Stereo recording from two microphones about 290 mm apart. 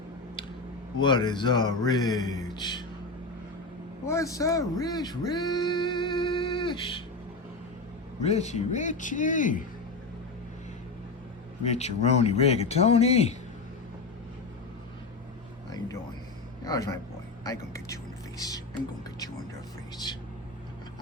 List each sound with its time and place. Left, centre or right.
1.0 s speech: centre
4.0 s speech: centre
8.2 s speech: left
11.6 s speech: left
16.6 s speech: centre
18.3 s a sound: centre